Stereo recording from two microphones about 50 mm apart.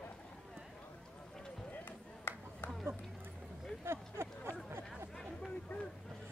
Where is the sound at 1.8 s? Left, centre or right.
Left.